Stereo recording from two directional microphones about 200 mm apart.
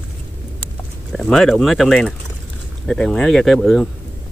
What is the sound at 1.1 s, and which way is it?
Speech, centre (ahead or behind).